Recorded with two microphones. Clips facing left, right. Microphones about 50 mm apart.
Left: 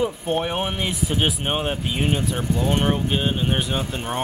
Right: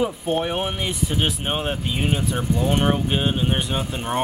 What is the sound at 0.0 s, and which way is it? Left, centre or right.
A man's voice, centre.